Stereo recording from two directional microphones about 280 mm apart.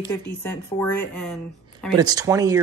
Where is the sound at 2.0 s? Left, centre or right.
Centre.